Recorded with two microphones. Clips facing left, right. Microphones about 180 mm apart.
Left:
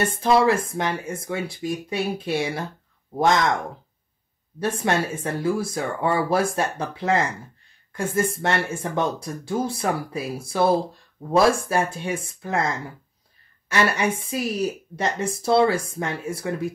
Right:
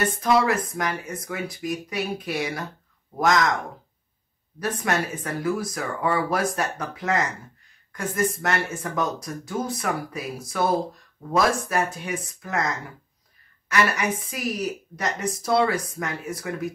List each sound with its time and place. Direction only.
0.0 s speech: 30° left (ahead or behind)
4.6 s speech: 30° left (ahead or behind)